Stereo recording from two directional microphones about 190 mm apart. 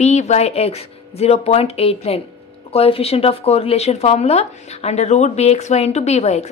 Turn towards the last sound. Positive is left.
turn(degrees=35)  # may be behind; listen again after turning